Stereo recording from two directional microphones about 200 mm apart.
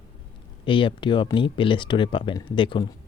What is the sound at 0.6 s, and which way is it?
Speech, 25° left (ahead or behind).